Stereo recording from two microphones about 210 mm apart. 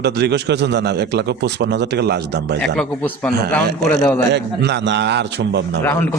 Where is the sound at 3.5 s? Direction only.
5° left (ahead or behind).